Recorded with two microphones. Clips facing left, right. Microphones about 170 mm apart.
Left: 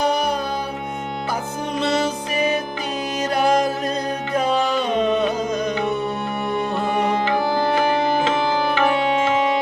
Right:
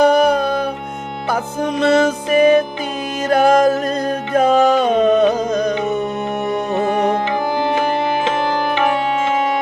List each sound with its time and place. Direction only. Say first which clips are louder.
0.0 s music: right 8 dB; 55° right (ahead or behind)
1.8 s music: right 7 dB; 50° right (ahead or behind)